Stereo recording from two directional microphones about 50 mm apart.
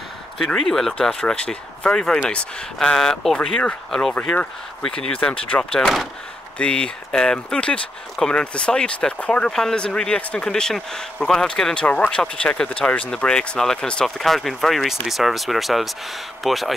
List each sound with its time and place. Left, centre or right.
0.6 s speech: centre
1.2 s speech: left
4.1 s speech: left
6.6 s speech: centre
9.5 s speech: centre
11.9 s speech: left
14.0 s speech: centre